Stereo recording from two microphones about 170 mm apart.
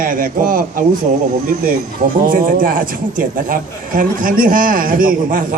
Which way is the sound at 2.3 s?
55° right (ahead or behind).